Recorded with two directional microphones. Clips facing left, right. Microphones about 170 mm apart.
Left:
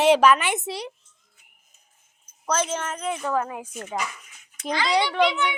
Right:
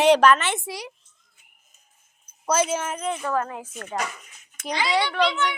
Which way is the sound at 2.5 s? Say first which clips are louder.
Right 3 dB; 10° right (ahead or behind).